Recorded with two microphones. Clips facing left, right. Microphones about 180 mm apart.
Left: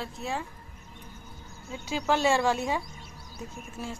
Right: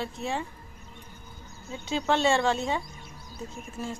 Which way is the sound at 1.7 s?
5° left (ahead or behind).